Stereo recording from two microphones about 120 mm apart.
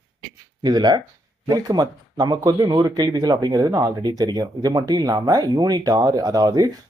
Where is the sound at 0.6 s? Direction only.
35° right (ahead or behind).